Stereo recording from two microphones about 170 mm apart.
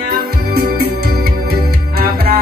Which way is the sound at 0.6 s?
65° right (ahead or behind).